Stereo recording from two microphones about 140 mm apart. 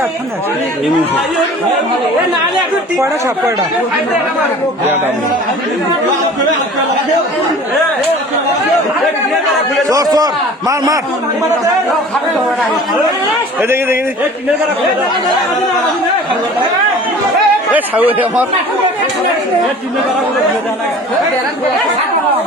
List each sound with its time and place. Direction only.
3.0 s speech: 20° right (ahead or behind)
9.9 s speech: 25° right (ahead or behind)
13.6 s speech: 15° right (ahead or behind)
17.7 s speech: 10° right (ahead or behind)